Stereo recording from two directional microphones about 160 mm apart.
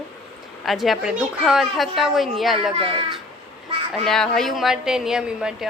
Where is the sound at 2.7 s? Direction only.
35° right (ahead or behind).